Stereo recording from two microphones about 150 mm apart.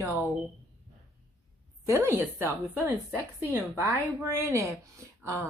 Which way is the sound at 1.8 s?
15° right (ahead or behind).